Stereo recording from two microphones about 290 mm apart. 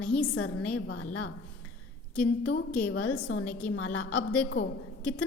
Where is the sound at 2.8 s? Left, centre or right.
Centre.